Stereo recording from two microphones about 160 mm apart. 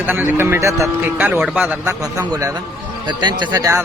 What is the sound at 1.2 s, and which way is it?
A man's voice, 5° right (ahead or behind).